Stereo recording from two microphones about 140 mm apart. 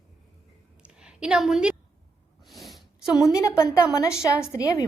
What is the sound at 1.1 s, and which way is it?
Speech, 5° right (ahead or behind).